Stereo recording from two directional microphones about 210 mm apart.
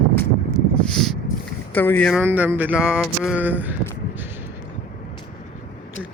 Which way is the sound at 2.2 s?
10° right (ahead or behind).